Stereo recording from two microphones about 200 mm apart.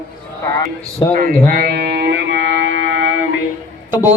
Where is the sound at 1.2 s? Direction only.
45° right (ahead or behind); by 2.7 s 65° right (ahead or behind).